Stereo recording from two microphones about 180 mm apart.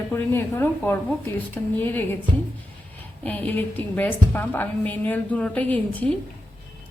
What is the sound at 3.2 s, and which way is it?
A woman's voice, 10° left (ahead or behind).